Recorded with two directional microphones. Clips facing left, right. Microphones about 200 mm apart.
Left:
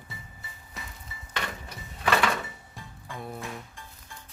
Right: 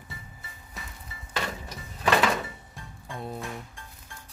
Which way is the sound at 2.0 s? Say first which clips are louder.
Right 2 dB; 20° right (ahead or behind).